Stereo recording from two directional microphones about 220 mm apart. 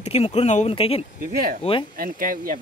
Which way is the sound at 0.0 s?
30° left (ahead or behind).